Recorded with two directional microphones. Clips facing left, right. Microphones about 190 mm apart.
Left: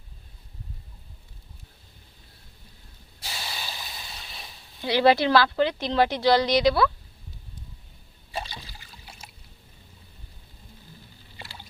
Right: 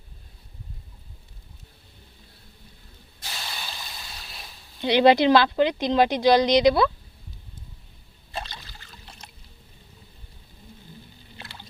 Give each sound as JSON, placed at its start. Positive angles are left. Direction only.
{"t": 3.2, "sound": "snort", "side_deg": 10}
{"t": 4.8, "sound": "speech", "side_deg": -20}
{"t": 8.3, "sound": "trickle", "side_deg": 10}